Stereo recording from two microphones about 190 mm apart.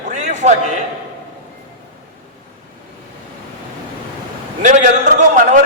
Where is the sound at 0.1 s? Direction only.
40° right (ahead or behind).